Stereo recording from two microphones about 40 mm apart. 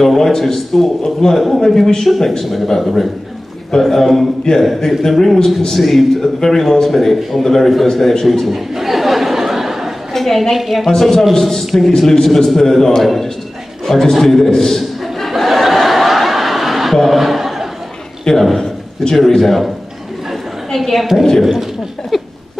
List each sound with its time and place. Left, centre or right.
0.0 s a man's voice: centre
10.1 s a woman's voice: centre
10.9 s a man's voice: centre
14.8 s chuckle: centre
18.2 s a man's voice: centre
20.7 s a woman's voice: centre
22.1 s a sound: centre